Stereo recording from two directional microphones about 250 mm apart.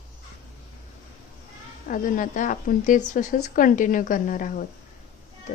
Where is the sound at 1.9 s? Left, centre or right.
Left.